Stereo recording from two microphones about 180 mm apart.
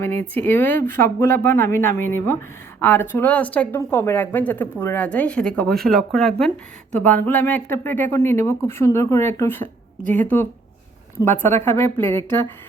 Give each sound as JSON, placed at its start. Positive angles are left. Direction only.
{"t": 0.0, "sound": "a woman's voice", "side_deg": 10}